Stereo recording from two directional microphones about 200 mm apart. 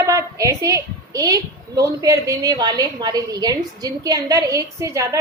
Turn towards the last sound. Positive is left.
turn(degrees=-15)  # may be behind; listen again after turning